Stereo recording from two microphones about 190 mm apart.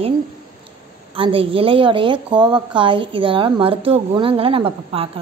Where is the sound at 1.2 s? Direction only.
30° right (ahead or behind).